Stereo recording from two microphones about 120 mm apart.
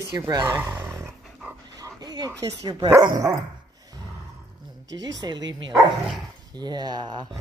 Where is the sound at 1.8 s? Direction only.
35° right (ahead or behind).